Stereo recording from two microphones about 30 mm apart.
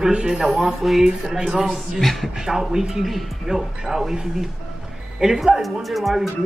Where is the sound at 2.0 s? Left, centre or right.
Centre.